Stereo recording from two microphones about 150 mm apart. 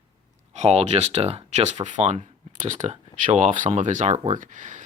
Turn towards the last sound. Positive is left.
turn(degrees=-55)  # may be behind; listen again after turning